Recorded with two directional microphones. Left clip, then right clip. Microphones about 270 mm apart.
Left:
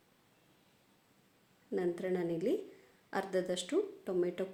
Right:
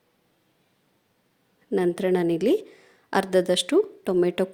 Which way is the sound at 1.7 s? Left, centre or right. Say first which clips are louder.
Right 12 dB; right.